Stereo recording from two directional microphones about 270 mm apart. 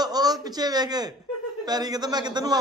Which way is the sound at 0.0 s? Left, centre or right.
Centre.